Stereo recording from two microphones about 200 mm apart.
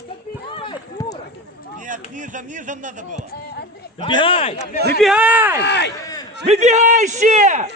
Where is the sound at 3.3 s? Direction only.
55° left (ahead or behind).